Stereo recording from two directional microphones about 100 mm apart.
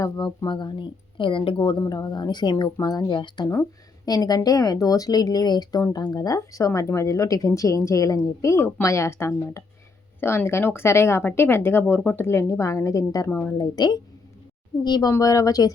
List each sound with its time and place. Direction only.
0.0 s speech: 45° left (ahead or behind); by 1.8 s 60° left (ahead or behind)
1.8 s a woman's voice: 40° left (ahead or behind)
13.3 s speech: 20° left (ahead or behind)
13.6 s a woman's voice: 45° left (ahead or behind)